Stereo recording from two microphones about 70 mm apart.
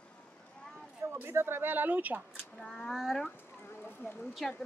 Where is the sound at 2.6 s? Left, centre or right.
Centre.